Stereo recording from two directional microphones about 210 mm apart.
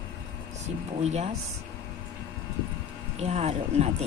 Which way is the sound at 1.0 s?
30° right (ahead or behind).